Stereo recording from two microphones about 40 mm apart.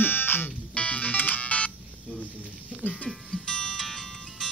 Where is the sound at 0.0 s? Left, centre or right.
Left.